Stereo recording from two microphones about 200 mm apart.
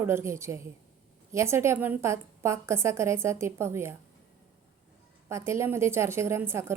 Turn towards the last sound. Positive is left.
turn(degrees=-10)  # may be behind; listen again after turning